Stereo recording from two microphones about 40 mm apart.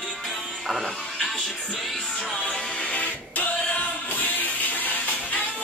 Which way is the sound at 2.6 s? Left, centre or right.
Left.